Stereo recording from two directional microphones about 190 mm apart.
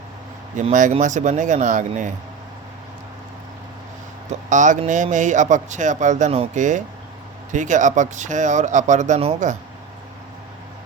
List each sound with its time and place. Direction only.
0.5 s speech: 40° right (ahead or behind)
4.3 s speech: 40° right (ahead or behind)